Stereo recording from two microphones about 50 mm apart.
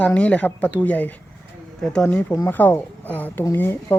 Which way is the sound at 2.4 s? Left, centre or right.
Left.